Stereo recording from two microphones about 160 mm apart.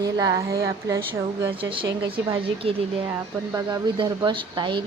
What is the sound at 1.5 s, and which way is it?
Speech, 30° right (ahead or behind).